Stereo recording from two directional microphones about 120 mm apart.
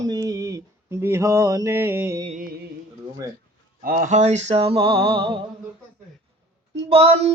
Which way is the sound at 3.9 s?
80° right.